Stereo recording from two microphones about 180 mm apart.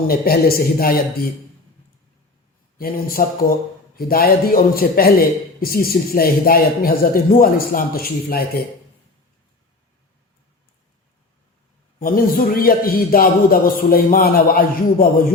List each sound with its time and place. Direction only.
0.1 s a man's voice: 55° left (ahead or behind)
2.7 s a man's voice: 55° left (ahead or behind)
11.9 s a man's voice: 50° left (ahead or behind)